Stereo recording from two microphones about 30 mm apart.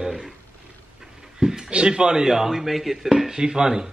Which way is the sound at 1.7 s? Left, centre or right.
Right.